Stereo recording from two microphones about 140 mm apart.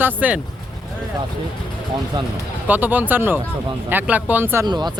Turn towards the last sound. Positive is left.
turn(degrees=-30)  # may be behind; listen again after turning